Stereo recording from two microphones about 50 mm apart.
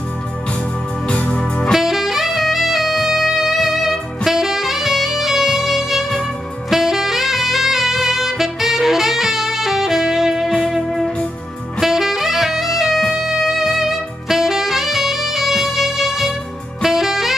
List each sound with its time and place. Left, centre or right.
1.0 s music: left
1.7 s saxophone: centre
11.8 s saxophone: centre